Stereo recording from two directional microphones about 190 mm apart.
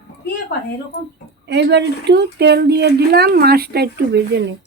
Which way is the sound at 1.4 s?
65° right (ahead or behind).